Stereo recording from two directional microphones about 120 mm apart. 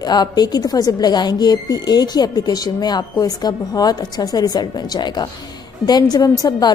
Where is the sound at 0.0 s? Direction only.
35° left (ahead or behind).